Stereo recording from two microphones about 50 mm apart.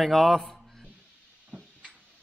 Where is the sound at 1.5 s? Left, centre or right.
Right.